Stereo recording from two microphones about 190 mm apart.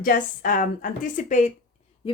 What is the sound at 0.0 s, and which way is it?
A woman's voice, 45° left (ahead or behind).